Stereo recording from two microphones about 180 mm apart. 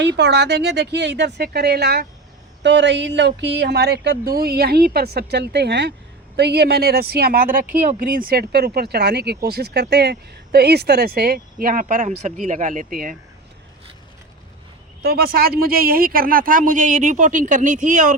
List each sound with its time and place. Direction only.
0.0 s speech: 70° right (ahead or behind)
2.6 s speech: 80° right; by 13.1 s 50° right (ahead or behind)
15.0 s speech: 55° right (ahead or behind)